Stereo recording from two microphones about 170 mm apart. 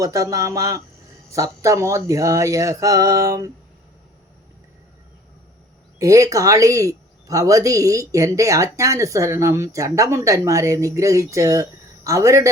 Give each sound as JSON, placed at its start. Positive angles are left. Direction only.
{"t": 0.0, "sound": "a man's voice", "side_deg": -20}
{"t": 6.0, "sound": "a man's voice", "side_deg": -20}